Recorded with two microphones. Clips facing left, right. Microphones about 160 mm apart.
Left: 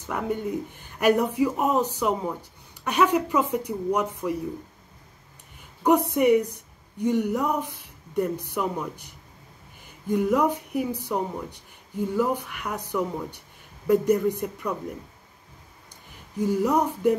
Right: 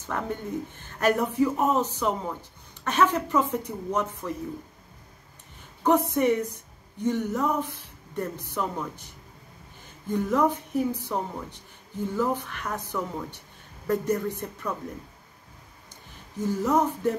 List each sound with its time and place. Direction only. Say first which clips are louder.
0.1 s speech: left 3 dB; 15° left (ahead or behind)
5.9 s a woman's voice: left 3 dB; 15° left (ahead or behind)
10.0 s speech: left 2 dB; 15° left (ahead or behind)
12.2 s speech: left 1 dB; 15° left (ahead or behind)
16.3 s speech: left 2 dB; 15° left (ahead or behind)